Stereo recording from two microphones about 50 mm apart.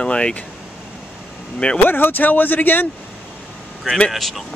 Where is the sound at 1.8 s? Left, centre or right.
Left.